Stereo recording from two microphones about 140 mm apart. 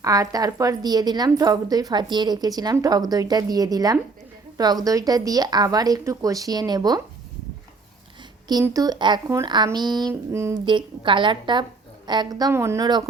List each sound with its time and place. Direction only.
0.0 s a woman's voice: 25° right (ahead or behind)
8.7 s a woman's voice: 30° right (ahead or behind)
10.7 s a woman's voice: 35° right (ahead or behind)